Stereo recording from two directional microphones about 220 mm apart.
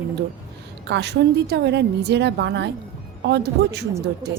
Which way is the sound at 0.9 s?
50° right (ahead or behind).